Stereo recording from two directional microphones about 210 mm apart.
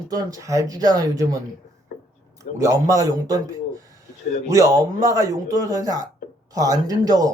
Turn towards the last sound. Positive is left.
turn(degrees=-20)  # may be behind; listen again after turning